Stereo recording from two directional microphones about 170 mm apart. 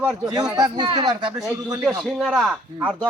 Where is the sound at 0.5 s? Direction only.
25° right (ahead or behind).